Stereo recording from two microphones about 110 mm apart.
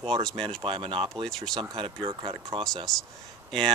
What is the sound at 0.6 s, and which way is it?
Speech, 50° right (ahead or behind).